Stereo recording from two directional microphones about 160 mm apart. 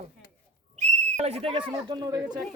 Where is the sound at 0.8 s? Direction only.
45° right (ahead or behind).